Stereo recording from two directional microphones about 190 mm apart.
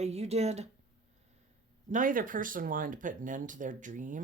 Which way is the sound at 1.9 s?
45° right (ahead or behind).